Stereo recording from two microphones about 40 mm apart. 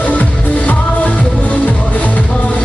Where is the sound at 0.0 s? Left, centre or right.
Left.